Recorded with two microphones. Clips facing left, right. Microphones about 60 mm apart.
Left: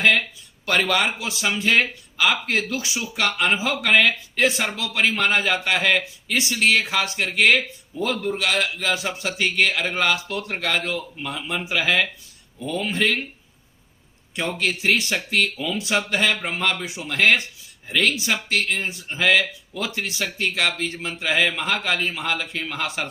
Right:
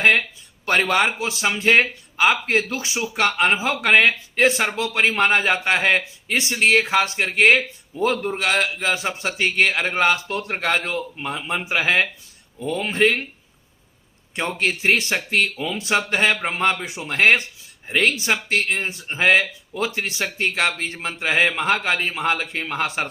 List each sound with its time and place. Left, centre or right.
0.9 s speech: right
14.3 s speech: right